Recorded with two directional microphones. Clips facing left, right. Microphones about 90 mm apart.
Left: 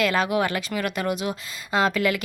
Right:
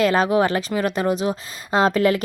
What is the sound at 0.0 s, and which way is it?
A woman's voice, 35° right (ahead or behind).